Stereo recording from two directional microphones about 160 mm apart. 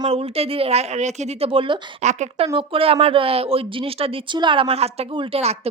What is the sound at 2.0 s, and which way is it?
A woman's voice, 45° right (ahead or behind).